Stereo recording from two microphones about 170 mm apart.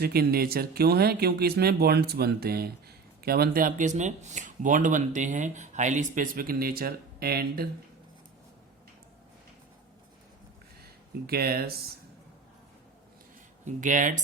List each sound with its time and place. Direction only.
0.0 s speech: 65° right (ahead or behind)
11.3 s speech: 65° right (ahead or behind)
13.7 s speech: 50° right (ahead or behind)